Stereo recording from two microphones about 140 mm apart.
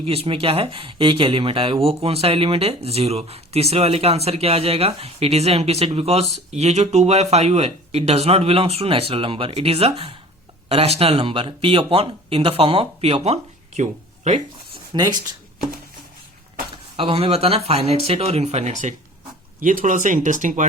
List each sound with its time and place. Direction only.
0.0 s speech: 45° right (ahead or behind)
14.9 s speech: 30° right (ahead or behind)
17.0 s speech: 45° right (ahead or behind)
19.5 s speech: 70° right (ahead or behind)